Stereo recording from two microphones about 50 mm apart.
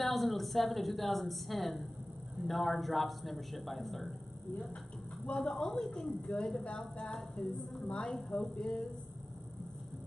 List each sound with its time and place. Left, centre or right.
0.0 s a woman's voice: centre
5.4 s speech: centre